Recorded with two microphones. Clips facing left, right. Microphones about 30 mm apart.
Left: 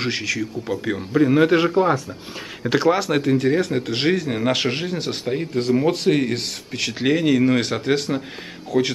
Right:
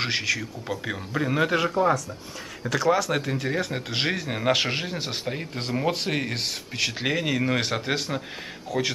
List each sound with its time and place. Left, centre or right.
0.0 s speech: centre
1.5 s speech: centre
2.7 s speech: left
3.1 s speech: centre